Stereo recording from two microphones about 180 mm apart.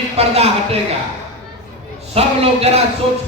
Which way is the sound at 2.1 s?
35° right (ahead or behind).